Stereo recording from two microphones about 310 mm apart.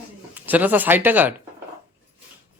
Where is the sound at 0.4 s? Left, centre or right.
Centre.